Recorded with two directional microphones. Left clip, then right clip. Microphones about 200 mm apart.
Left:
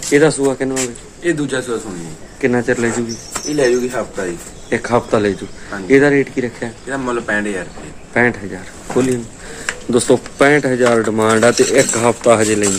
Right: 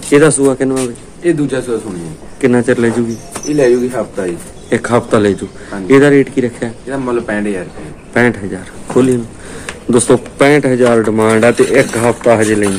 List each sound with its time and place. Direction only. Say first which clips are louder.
0.1 s speech: right 4 dB; centre (ahead or behind); by 12.6 s 15° left (ahead or behind)